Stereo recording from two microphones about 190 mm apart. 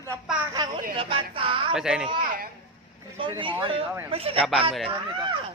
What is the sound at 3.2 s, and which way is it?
A man's voice, 25° right (ahead or behind).